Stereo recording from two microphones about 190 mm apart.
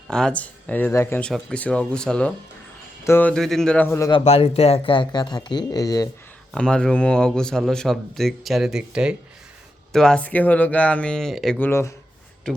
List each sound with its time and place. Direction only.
0.1 s a man's voice: 5° left (ahead or behind)
4.2 s speech: 30° left (ahead or behind)
6.5 s a man's voice: 5° left (ahead or behind)